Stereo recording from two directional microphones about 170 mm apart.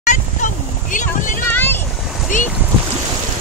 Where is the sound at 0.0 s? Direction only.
45° left (ahead or behind).